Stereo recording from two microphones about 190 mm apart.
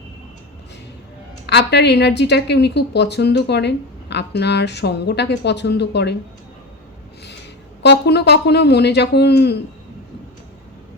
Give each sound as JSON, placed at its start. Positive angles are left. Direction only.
{"t": 1.5, "sound": "a woman's voice", "side_deg": 65}
{"t": 7.8, "sound": "a woman's voice", "side_deg": 60}